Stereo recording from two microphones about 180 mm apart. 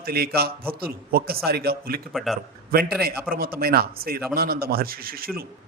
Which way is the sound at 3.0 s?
55° right (ahead or behind).